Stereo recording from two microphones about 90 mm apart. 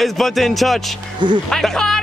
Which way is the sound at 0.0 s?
Centre (ahead or behind).